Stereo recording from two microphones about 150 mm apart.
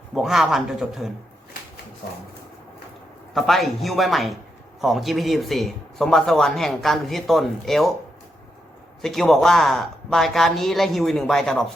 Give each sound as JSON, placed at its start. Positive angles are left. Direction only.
{"t": 0.1, "sound": "speech", "side_deg": 0}
{"t": 3.3, "sound": "speech", "side_deg": 0}
{"t": 9.0, "sound": "speech", "side_deg": 0}